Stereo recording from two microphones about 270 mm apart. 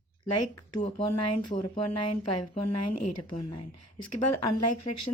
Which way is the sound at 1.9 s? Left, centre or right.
Left.